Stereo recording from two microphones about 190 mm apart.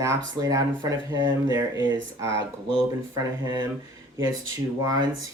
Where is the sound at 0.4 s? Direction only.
15° right (ahead or behind).